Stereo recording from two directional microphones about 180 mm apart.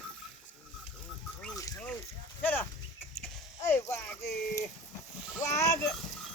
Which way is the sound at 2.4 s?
10° left (ahead or behind).